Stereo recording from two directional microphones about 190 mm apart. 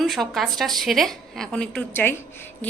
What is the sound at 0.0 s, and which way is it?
A woman's voice, centre (ahead or behind).